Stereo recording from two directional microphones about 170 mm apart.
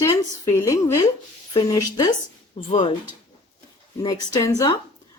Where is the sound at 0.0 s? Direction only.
20° left (ahead or behind).